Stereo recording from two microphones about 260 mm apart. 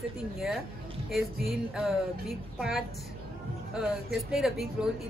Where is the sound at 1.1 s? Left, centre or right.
Centre.